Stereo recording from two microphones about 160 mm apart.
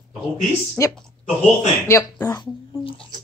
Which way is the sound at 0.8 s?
20° left (ahead or behind).